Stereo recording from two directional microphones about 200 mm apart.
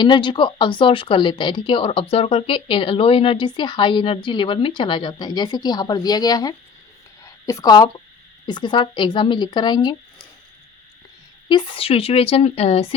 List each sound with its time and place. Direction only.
0.0 s speech: 25° left (ahead or behind)
11.4 s speech: 25° left (ahead or behind)